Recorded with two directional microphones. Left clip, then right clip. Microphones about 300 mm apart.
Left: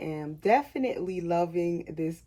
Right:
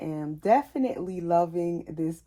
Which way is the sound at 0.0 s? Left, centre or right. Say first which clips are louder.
Even; centre.